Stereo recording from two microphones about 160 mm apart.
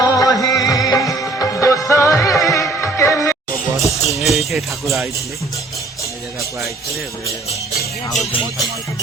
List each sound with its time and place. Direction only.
0.0 s music: 20° left (ahead or behind)
3.8 s music: centre (ahead or behind)